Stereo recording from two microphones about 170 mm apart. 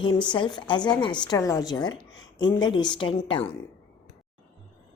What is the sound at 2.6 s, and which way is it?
Speech, 25° left (ahead or behind).